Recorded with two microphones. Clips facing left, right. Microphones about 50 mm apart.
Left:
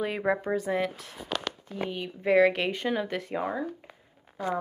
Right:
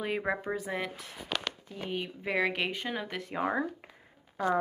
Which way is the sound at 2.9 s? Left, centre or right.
Centre.